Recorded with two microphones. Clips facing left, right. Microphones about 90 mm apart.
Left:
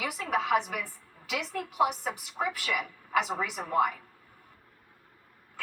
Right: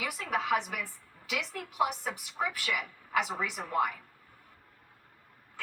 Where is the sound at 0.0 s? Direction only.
15° left (ahead or behind).